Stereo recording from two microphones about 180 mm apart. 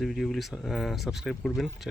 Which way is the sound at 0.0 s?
Centre (ahead or behind).